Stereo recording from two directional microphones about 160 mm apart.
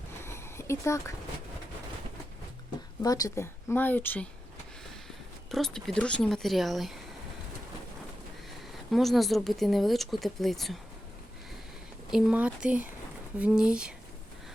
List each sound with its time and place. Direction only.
0.2 s a sound: 15° left (ahead or behind)
3.0 s speech: 20° left (ahead or behind)
5.5 s speech: centre (ahead or behind)
8.9 s speech: centre (ahead or behind)
12.1 s speech: 5° right (ahead or behind)